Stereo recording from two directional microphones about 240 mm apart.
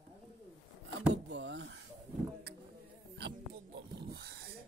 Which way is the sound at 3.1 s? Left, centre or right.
Right.